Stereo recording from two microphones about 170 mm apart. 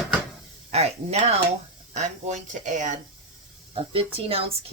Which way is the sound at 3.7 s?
35° right (ahead or behind).